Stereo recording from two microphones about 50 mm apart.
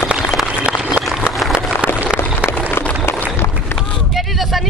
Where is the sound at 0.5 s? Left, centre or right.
Right.